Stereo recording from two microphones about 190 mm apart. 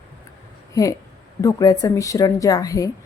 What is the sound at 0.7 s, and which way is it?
A woman's voice, 15° left (ahead or behind).